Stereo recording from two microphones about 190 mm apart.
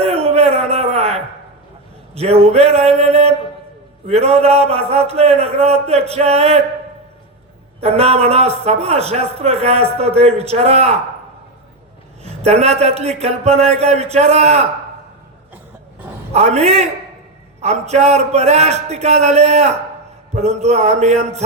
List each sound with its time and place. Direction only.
0.0 s a sound: 35° right (ahead or behind)
2.1 s speech: 35° right (ahead or behind)
7.8 s speech: 30° right (ahead or behind)
12.2 s speech: 35° right (ahead or behind)
16.3 s speech: 35° right (ahead or behind)